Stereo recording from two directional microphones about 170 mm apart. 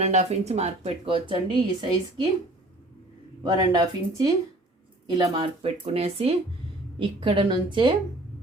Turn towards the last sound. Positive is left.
turn(degrees=-30)  # may be behind; listen again after turning